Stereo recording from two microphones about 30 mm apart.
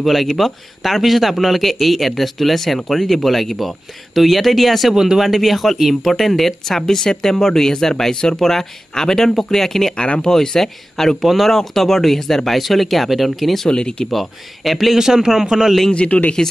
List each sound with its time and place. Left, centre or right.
0.0 s speech: centre
4.9 s a man's voice: centre
5.2 s speech: centre
6.9 s speech: centre
8.4 s speech: centre
10.3 s speech: left
10.6 s speech: centre
11.2 s speech: centre
11.5 s speech: centre
13.7 s speech: left
14.1 s speech: centre
15.0 s a man's voice: centre
15.9 s a man's voice: left